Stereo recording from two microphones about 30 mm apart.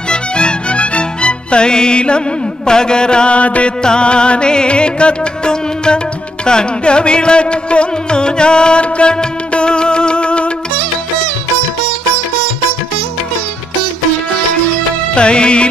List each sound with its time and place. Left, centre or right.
0.1 s music: left
3.3 s music: left
3.8 s music: left
15.1 s music: left